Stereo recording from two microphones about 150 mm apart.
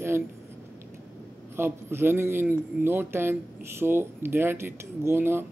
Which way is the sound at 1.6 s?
15° right (ahead or behind).